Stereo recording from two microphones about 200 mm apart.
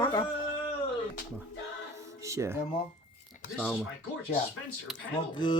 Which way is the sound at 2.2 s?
15° right (ahead or behind).